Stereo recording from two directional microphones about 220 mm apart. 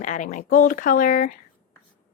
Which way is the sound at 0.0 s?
35° left (ahead or behind).